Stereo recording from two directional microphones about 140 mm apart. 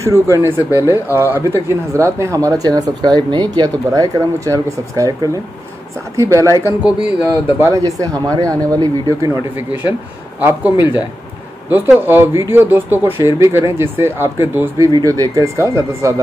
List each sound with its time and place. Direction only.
0.0 s speech: 20° right (ahead or behind)
9.7 s speech: 10° right (ahead or behind)